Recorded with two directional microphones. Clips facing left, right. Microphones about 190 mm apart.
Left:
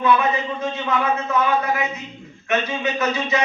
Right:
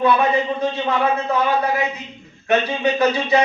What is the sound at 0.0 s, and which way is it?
Speech, 35° right (ahead or behind).